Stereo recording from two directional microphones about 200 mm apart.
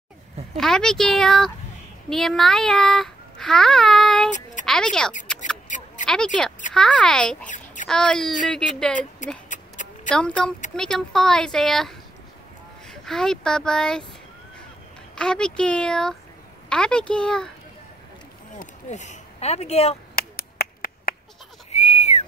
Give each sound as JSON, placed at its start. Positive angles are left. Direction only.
{"t": 0.6, "sound": "a child's voice", "side_deg": 0}
{"t": 7.4, "sound": "a sound", "side_deg": 40}
{"t": 7.9, "sound": "speech", "side_deg": 5}
{"t": 9.2, "sound": "speech", "side_deg": 40}
{"t": 10.0, "sound": "speech", "side_deg": 5}
{"t": 15.1, "sound": "speech", "side_deg": 5}
{"t": 18.6, "sound": "speech", "side_deg": 35}
{"t": 20.2, "sound": "finger snapping", "side_deg": 50}
{"t": 21.7, "sound": "whistling", "side_deg": 30}